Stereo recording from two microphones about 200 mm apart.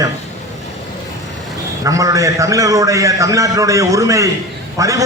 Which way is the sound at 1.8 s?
15° right (ahead or behind).